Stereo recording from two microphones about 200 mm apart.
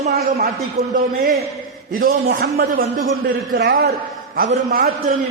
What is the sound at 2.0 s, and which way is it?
Speech, 50° right (ahead or behind).